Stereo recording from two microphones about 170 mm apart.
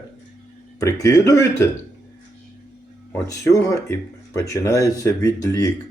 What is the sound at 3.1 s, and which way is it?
Speech, 15° left (ahead or behind).